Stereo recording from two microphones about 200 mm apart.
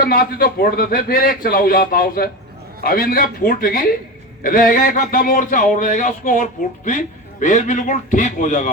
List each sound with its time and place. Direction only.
0.0 s a man's voice: 50° left (ahead or behind)